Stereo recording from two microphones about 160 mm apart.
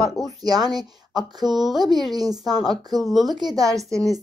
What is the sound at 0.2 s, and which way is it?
Speech, 25° right (ahead or behind).